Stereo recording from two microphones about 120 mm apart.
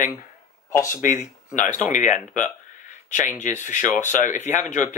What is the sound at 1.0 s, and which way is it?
Speech, 90° left.